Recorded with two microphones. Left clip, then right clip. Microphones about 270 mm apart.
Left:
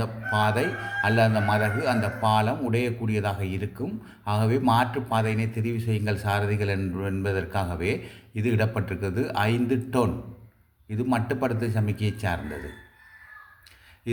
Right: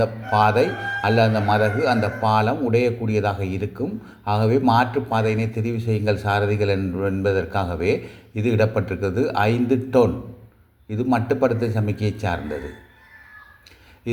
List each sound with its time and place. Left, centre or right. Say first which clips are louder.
0.4 s a man's voice: right 7 dB; centre